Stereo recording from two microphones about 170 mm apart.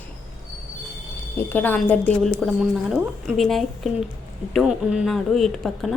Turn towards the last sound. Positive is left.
turn(degrees=0)  # may be behind; listen again after turning